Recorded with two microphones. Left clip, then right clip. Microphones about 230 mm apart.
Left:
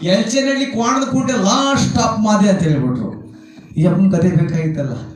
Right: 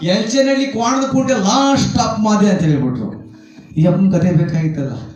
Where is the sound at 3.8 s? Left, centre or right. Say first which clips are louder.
Right 1 dB; centre.